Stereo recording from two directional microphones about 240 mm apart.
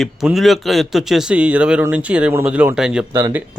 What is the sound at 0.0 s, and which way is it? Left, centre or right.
Speech, centre.